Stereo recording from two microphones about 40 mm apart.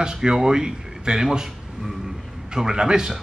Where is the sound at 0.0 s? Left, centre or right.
Centre.